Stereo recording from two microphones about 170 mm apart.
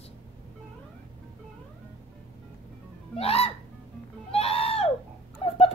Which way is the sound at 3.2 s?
35° left (ahead or behind).